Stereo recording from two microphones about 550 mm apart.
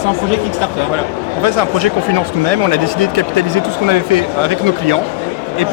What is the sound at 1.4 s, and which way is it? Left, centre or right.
Speech, right.